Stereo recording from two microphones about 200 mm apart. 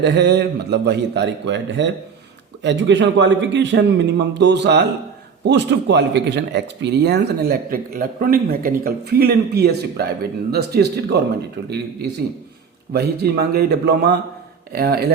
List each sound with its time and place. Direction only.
0.0 s speech: 60° right (ahead or behind)
12.9 s speech: 55° right (ahead or behind)